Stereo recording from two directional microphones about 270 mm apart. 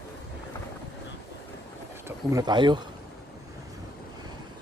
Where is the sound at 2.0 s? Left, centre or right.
Centre.